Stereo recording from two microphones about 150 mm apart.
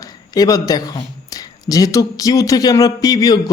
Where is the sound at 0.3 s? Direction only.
25° left (ahead or behind).